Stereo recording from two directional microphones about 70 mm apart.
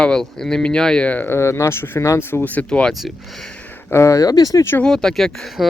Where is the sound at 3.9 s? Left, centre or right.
Left.